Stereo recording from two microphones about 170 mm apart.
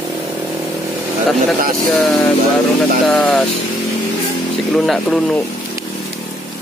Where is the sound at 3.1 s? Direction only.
10° left (ahead or behind).